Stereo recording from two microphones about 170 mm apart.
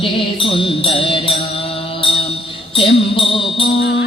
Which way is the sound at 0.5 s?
30° left (ahead or behind).